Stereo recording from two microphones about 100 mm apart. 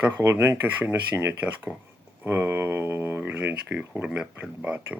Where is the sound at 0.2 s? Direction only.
25° right (ahead or behind).